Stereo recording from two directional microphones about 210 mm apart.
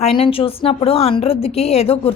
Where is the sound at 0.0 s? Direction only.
25° left (ahead or behind).